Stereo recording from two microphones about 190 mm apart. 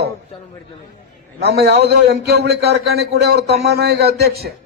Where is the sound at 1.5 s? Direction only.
55° right (ahead or behind).